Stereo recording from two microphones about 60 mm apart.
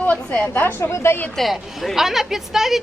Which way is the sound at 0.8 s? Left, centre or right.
Left.